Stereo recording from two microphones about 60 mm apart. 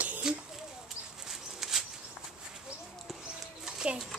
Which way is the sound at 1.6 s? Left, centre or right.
Centre.